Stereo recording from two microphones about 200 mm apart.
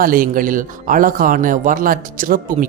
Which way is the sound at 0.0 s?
45° right (ahead or behind).